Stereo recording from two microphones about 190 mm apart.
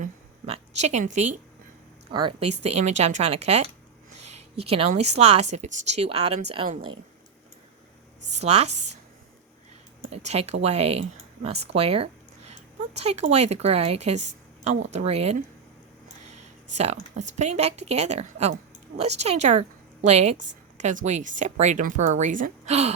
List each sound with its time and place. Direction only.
0.0 s a sound: 35° right (ahead or behind)
2.1 s a woman's voice: 30° right (ahead or behind)
8.3 s a woman's voice: 35° right (ahead or behind)
10.1 s a woman's voice: 35° right (ahead or behind)
16.7 s a woman's voice: 35° right (ahead or behind)